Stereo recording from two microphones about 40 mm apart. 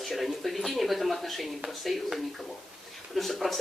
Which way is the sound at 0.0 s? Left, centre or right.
Centre.